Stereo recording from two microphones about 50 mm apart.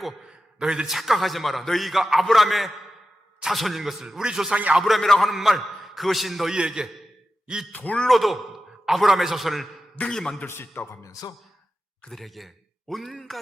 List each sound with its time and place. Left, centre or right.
0.3 s a man's voice: centre
0.9 s a man's voice: centre
4.5 s speech: right
4.8 s a man's voice: centre
6.5 s speech: centre
7.7 s speech: left
8.0 s a man's voice: centre
10.1 s a man's voice: centre
10.4 s a man's voice: left
12.1 s a man's voice: centre